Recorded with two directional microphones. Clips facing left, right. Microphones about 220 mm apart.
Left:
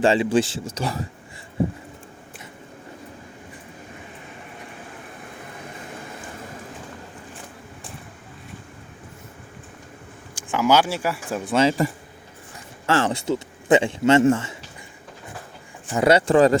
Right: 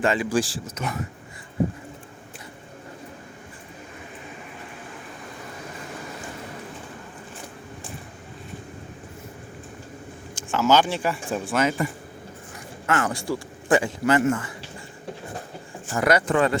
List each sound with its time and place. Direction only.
0.0 s a man's voice: 30° left (ahead or behind)
10.5 s speech: 10° left (ahead or behind)
11.4 s a man's voice: 30° left (ahead or behind)
12.9 s a man's voice: 30° left (ahead or behind)
15.9 s a man's voice: 25° left (ahead or behind)